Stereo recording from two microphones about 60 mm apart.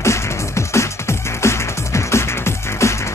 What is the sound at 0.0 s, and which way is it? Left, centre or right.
Music, left.